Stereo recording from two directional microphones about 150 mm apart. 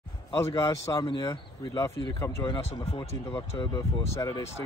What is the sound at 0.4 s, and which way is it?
Speech, 20° left (ahead or behind).